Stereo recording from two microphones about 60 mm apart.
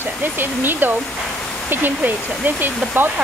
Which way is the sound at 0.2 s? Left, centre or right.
Right.